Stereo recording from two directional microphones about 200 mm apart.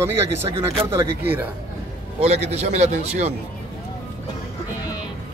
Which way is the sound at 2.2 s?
35° right (ahead or behind).